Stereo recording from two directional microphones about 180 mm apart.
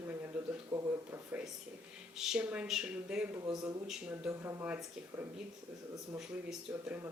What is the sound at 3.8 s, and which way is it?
Speech, 5° right (ahead or behind).